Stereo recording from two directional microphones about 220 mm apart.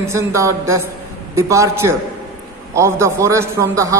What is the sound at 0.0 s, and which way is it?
A man's voice, 10° right (ahead or behind).